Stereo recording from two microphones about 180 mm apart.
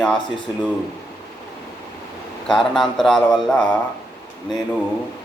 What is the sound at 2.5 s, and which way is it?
A man's voice, centre (ahead or behind).